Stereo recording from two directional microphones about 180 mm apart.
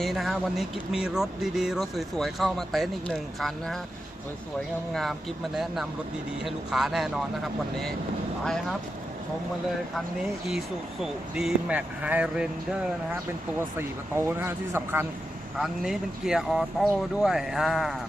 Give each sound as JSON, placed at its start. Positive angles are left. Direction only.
{"t": 0.0, "sound": "speech", "side_deg": 0}
{"t": 5.5, "sound": "speech", "side_deg": 0}
{"t": 11.0, "sound": "speech", "side_deg": 0}
{"t": 14.3, "sound": "speech", "side_deg": -10}
{"t": 15.5, "sound": "speech", "side_deg": 0}